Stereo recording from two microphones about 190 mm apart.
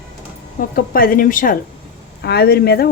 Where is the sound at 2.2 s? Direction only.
60° left (ahead or behind).